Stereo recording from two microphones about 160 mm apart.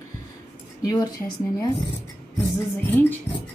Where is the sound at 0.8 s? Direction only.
25° left (ahead or behind).